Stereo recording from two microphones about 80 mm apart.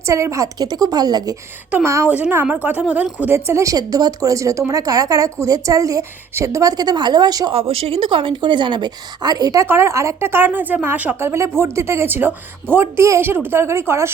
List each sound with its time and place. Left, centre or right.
0.0 s a woman's voice: right
1.7 s a woman's voice: right
2.3 s a woman's voice: right
3.3 s a woman's voice: right
3.8 s a woman's voice: right
8.0 s a woman's voice: right
9.6 s a woman's voice: right
11.3 s a woman's voice: right